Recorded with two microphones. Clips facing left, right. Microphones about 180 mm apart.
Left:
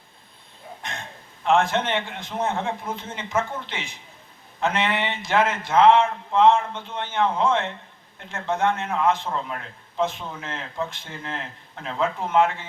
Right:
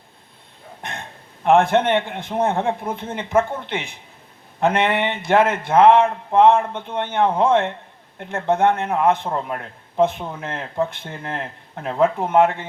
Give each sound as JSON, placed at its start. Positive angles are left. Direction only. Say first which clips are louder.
{"t": 0.8, "sound": "burping", "louder": "right 4 dB", "side_deg": -60}
{"t": 1.5, "sound": "a man's voice", "louder": "right 6 dB", "side_deg": -60}